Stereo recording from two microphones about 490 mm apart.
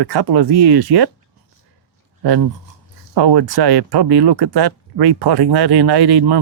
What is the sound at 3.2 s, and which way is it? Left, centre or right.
Speech, right.